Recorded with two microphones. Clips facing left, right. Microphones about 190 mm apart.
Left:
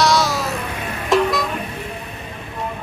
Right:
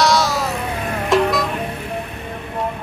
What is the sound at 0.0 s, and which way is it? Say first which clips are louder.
Music: right 1 dB; centre (ahead or behind).